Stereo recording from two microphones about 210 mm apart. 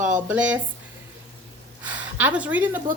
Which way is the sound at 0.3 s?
5° right (ahead or behind).